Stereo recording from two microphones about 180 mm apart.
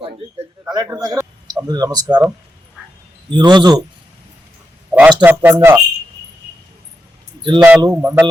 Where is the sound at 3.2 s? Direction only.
25° right (ahead or behind).